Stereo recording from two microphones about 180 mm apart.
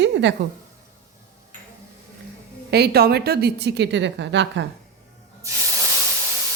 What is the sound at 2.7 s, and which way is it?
A woman's voice, 60° right (ahead or behind).